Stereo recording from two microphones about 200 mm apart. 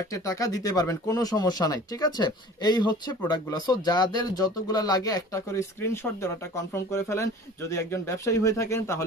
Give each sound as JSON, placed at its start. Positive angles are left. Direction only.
{"t": 0.1, "sound": "speech", "side_deg": 15}